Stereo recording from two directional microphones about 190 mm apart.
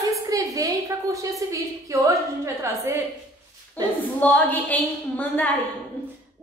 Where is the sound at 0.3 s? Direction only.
20° right (ahead or behind).